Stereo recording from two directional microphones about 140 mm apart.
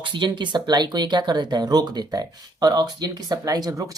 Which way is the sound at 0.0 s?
35° right (ahead or behind).